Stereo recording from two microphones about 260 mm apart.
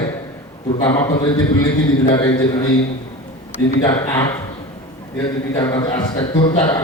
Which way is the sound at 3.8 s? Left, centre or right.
Centre.